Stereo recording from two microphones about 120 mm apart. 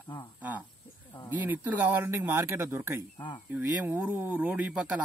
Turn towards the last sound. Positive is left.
turn(degrees=-10)  # may be behind; listen again after turning